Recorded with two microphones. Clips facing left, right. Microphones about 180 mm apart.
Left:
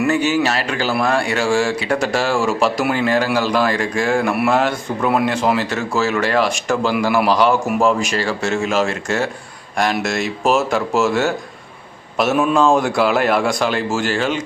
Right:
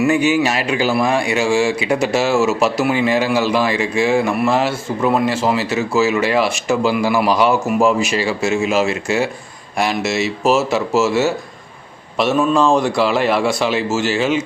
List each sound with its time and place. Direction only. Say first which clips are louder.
0.0 s speech: right 2 dB; 10° right (ahead or behind)